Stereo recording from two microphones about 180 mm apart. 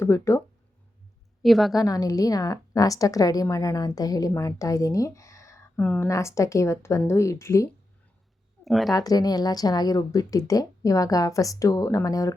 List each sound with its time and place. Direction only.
0.0 s speech: 15° left (ahead or behind)
1.4 s a woman's voice: centre (ahead or behind)
1.7 s a woman's voice: 20° left (ahead or behind)
8.6 s speech: centre (ahead or behind)
8.9 s a woman's voice: 20° left (ahead or behind)